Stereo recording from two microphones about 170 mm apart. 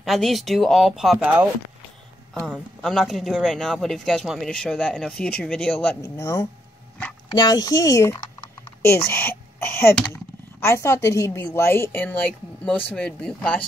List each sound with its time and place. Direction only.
0.0 s speech: centre (ahead or behind)
2.4 s speech: 5° left (ahead or behind)
5.9 s a woman's voice: 15° left (ahead or behind)